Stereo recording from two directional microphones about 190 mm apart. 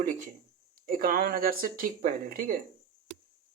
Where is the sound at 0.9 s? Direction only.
50° right (ahead or behind).